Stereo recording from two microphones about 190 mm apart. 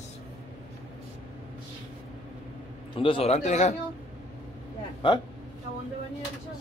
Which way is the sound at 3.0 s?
30° left (ahead or behind).